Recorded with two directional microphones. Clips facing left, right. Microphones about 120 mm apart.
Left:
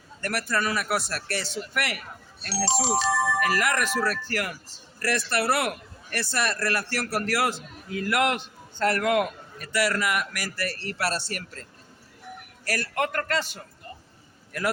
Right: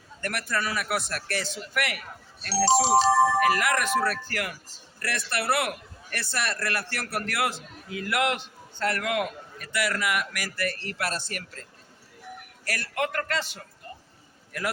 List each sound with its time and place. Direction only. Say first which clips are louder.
0.2 s a man's voice: left 2 dB; 40° left (ahead or behind)
2.6 s speech: right 5 dB; 30° right (ahead or behind)
3.6 s a man's voice: right 1 dB; 40° left (ahead or behind)
12.6 s a man's voice: left 2 dB; 40° left (ahead or behind)